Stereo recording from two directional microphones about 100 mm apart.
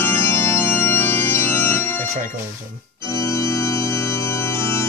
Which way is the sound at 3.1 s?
30° left (ahead or behind).